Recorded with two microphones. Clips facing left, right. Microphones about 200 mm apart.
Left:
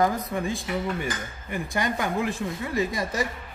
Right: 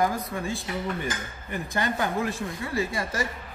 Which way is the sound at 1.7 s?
15° left (ahead or behind).